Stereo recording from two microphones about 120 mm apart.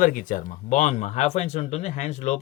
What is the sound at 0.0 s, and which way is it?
Speech, 90° left.